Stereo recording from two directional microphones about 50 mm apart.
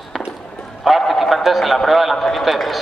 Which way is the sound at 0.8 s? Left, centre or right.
Centre.